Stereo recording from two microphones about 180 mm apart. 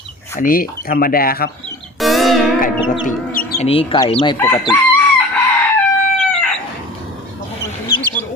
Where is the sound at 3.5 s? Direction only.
35° left (ahead or behind).